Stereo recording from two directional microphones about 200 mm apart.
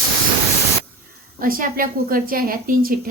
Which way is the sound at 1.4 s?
45° right (ahead or behind).